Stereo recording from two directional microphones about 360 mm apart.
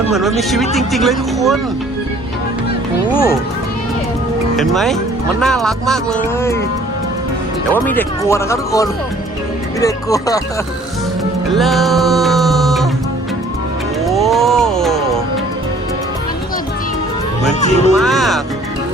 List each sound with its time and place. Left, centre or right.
0.1 s speech: centre
3.1 s speech: centre
4.5 s speech: centre
7.7 s speech: centre
11.5 s music: centre
14.0 s music: centre
17.5 s speech: centre
17.9 s speech: centre